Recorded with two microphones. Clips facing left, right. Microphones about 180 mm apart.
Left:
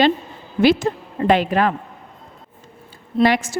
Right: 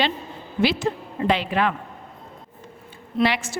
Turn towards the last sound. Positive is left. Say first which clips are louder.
# left 5 dB
turn(degrees=45)  # may be behind; listen again after turning